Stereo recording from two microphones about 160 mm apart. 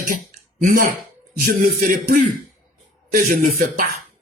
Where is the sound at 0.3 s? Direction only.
60° right (ahead or behind).